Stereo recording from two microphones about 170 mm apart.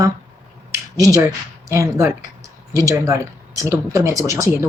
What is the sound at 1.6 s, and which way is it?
Speech, 20° right (ahead or behind).